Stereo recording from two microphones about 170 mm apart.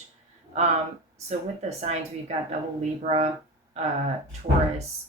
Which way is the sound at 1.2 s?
40° right (ahead or behind).